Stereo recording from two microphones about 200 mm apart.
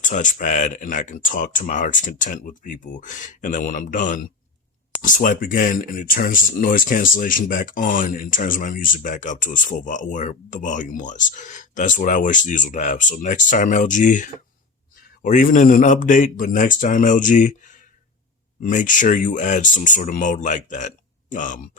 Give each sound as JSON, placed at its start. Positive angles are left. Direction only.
{"t": 0.0, "sound": "speech", "side_deg": 40}